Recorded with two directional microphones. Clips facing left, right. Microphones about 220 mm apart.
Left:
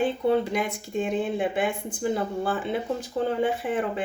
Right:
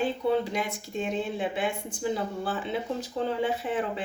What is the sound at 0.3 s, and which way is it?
A woman's voice, 55° left (ahead or behind).